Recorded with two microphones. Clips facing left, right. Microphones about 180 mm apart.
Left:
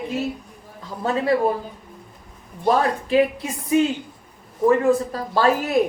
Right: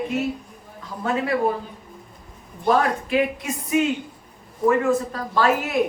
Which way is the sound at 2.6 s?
30° left (ahead or behind).